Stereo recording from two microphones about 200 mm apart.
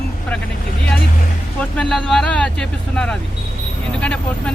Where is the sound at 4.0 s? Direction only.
5° left (ahead or behind).